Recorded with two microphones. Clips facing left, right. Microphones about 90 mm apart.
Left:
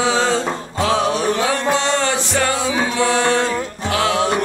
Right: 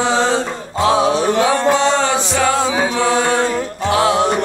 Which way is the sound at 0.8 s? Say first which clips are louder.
Right 4 dB; 20° right (ahead or behind).